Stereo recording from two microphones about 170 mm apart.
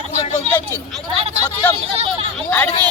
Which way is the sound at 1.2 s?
35° right (ahead or behind).